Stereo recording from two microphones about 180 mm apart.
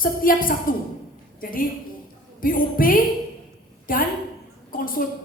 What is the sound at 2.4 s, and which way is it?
A woman's voice, 50° left (ahead or behind).